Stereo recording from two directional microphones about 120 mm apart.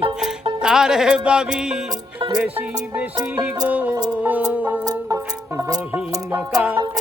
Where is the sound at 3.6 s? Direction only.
15° right (ahead or behind).